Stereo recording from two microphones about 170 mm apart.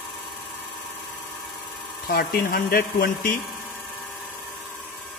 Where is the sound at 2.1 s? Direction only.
60° left (ahead or behind).